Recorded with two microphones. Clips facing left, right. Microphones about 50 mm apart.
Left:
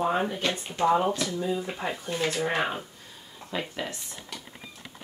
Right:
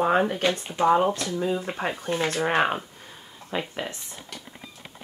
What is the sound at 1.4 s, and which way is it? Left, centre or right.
Speech, right.